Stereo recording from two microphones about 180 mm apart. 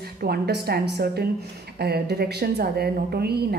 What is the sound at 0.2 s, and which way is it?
Speech, 60° right (ahead or behind).